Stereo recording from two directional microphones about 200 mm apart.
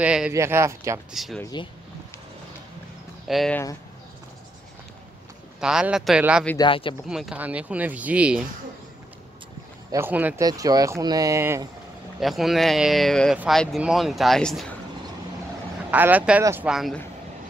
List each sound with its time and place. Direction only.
0.0 s speech: 5° right (ahead or behind)
1.1 s speech: centre (ahead or behind)
1.4 s speech: 20° left (ahead or behind)
3.3 s speech: centre (ahead or behind)
5.6 s speech: 5° right (ahead or behind)
6.6 s speech: 25° left (ahead or behind)
7.1 s speech: 5° right (ahead or behind)
9.8 s speech: 10° right (ahead or behind)
12.2 s speech: centre (ahead or behind)
15.9 s speech: 10° right (ahead or behind)